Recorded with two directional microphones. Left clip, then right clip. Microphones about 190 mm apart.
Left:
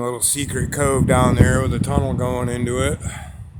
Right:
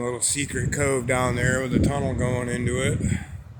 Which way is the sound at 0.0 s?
30° left (ahead or behind).